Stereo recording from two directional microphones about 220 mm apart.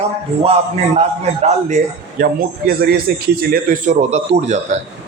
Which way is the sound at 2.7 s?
45° right (ahead or behind).